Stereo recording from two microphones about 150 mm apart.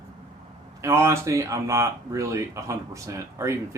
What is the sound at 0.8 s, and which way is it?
Speech, 20° right (ahead or behind).